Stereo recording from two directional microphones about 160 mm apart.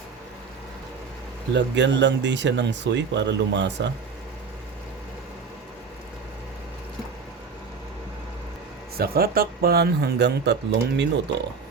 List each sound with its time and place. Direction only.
1.5 s speech: 90° right
9.0 s speech: 70° right (ahead or behind); by 11.1 s 90° right